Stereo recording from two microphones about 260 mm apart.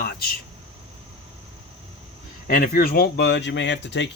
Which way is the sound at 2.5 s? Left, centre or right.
Left.